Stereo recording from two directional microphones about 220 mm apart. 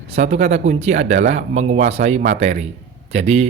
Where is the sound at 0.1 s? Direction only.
30° right (ahead or behind).